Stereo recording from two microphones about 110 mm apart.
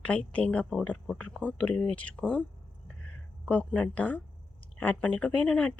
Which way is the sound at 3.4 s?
15° left (ahead or behind).